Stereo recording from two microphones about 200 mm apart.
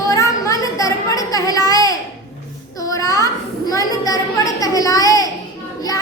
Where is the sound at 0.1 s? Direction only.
15° left (ahead or behind).